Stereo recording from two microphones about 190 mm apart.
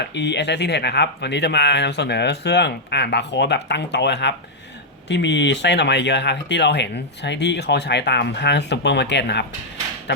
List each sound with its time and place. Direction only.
0.1 s speech: 65° left (ahead or behind)